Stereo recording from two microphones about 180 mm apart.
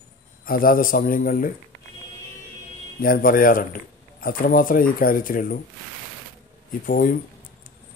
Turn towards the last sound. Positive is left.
turn(degrees=50)  # may be behind; listen again after turning